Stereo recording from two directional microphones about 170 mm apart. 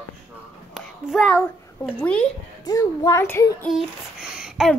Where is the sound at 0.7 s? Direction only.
Centre (ahead or behind).